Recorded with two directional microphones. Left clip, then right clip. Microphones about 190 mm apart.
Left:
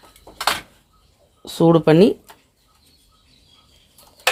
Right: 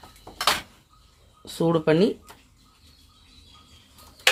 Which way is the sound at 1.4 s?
40° left (ahead or behind).